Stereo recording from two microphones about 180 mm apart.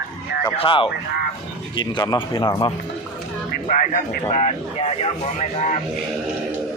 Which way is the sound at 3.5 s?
50° left (ahead or behind).